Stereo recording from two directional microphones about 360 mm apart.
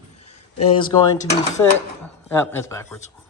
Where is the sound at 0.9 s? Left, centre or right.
Centre.